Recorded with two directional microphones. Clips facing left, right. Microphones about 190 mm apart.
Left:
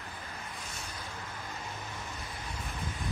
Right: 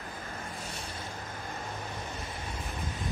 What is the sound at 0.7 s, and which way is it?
Boat, 30° right (ahead or behind).